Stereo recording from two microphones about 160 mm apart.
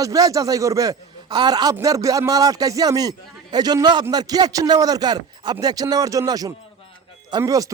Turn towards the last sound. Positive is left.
turn(degrees=-20)  # may be behind; listen again after turning